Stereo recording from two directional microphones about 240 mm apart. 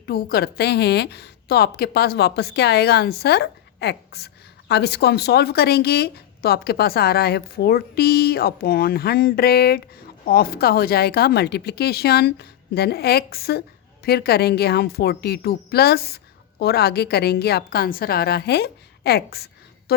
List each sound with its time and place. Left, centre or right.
0.0 s a woman's voice: left